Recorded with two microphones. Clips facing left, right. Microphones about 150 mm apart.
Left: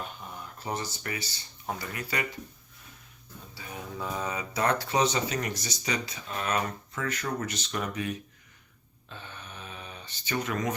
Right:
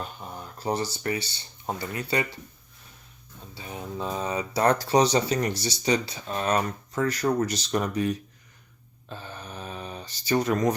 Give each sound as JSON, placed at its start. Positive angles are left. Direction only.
{"t": 0.3, "sound": "speech", "side_deg": -35}
{"t": 3.5, "sound": "speech", "side_deg": -25}
{"t": 9.0, "sound": "a sound", "side_deg": -35}